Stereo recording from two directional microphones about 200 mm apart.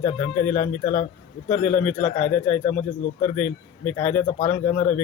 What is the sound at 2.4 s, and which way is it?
Speech, 35° left (ahead or behind).